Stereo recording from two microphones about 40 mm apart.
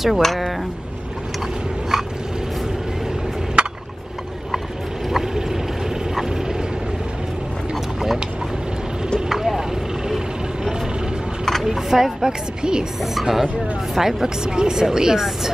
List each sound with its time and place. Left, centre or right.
0.0 s speech: centre
3.6 s a sound: right
5.1 s vehicle: centre
9.6 s vehicle: centre
11.6 s speech: centre
13.0 s speech: centre